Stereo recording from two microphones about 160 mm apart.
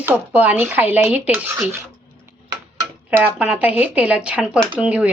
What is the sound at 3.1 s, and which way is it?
Speech, 10° right (ahead or behind).